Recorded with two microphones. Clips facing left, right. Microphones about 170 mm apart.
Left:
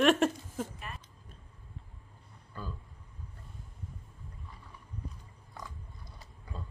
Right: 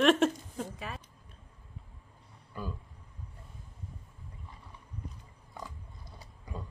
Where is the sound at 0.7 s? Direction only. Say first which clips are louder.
Right 4 dB; 90° right.